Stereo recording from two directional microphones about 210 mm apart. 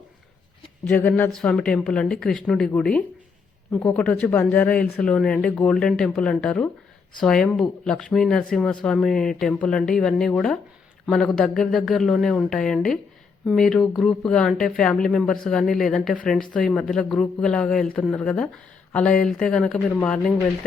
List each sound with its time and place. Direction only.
0.9 s speech: 5° left (ahead or behind)